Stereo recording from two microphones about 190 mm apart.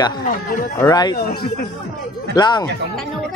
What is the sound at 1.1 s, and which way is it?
Speech, 50° left (ahead or behind).